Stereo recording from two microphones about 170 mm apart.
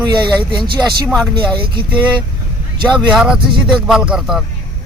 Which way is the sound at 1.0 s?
5° right (ahead or behind).